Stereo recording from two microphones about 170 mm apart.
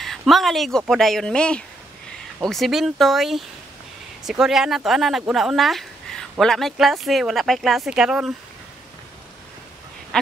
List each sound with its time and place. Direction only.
0.0 s speech: centre (ahead or behind)